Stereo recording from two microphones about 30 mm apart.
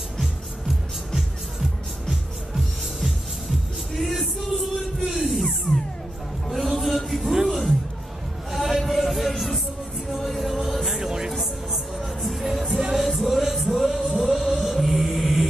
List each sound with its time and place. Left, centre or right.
2.0 s music: centre
6.5 s a sound: centre
7.4 s music: centre
8.5 s a sound: centre
10.0 s music: centre
11.0 s music: centre
11.3 s music: centre
14.2 s chant: centre